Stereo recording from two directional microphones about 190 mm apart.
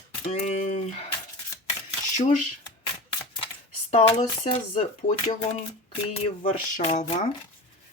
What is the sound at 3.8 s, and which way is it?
Speech, 35° left (ahead or behind).